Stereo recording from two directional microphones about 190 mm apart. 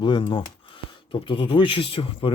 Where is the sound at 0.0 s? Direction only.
25° left (ahead or behind).